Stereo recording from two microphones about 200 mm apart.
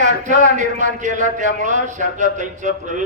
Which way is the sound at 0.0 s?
40° right (ahead or behind).